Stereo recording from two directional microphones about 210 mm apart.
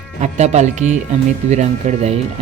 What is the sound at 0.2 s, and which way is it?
Speech, 30° right (ahead or behind).